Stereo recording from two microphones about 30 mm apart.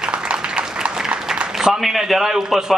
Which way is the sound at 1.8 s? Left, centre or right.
Centre.